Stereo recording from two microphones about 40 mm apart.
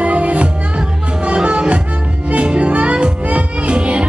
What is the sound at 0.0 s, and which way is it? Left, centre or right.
Music, right.